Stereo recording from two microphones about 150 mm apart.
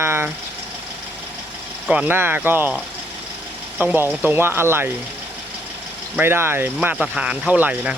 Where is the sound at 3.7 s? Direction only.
10° right (ahead or behind).